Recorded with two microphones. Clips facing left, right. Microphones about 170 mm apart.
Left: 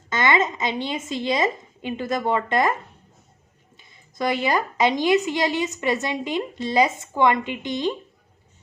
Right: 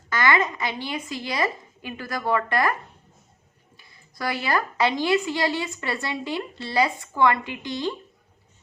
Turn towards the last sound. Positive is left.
turn(degrees=20)  # may be behind; listen again after turning